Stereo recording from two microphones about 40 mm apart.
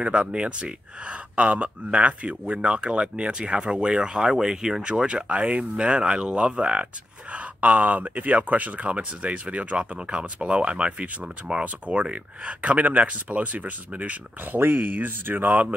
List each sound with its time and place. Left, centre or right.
0.1 s speech: right
7.3 s speech: right
9.9 s speech: right
14.6 s speech: right